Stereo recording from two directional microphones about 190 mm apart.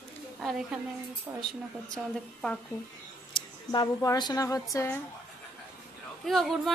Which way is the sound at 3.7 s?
20° left (ahead or behind).